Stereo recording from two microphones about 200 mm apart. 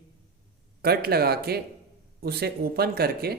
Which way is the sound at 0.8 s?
50° right (ahead or behind).